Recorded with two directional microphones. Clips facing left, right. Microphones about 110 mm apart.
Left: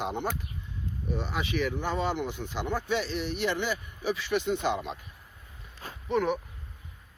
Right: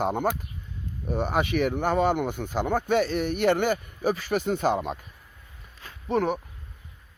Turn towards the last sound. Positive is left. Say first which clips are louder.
# right 2 dB
turn(degrees=-40)  # may be behind; listen again after turning